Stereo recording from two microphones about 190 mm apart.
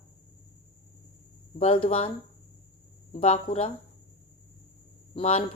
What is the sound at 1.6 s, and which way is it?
Speech, 30° left (ahead or behind).